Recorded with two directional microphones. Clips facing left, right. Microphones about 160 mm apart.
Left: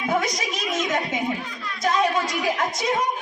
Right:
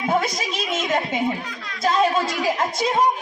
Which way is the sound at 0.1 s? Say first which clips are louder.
Right 1 dB; 30° right (ahead or behind).